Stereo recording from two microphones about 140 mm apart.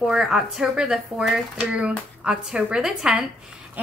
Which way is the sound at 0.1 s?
5° right (ahead or behind).